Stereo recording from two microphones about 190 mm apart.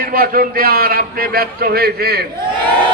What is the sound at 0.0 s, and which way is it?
A man's voice, 50° right (ahead or behind).